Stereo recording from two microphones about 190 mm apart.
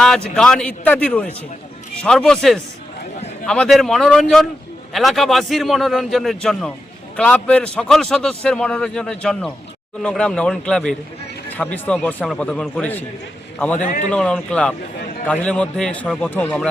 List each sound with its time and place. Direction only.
0.3 s a man's voice: 5° left (ahead or behind)
13.8 s speech: 45° left (ahead or behind)
14.1 s a man's voice: 5° left (ahead or behind)